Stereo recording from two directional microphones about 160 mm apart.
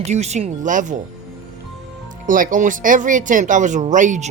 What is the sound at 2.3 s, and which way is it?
Speech, 55° right (ahead or behind).